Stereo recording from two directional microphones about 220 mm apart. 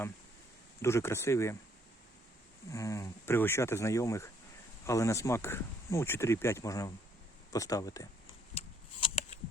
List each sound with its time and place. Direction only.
0.8 s speech: 10° left (ahead or behind)
2.7 s speech: 15° left (ahead or behind)
8.5 s a sound: 25° left (ahead or behind)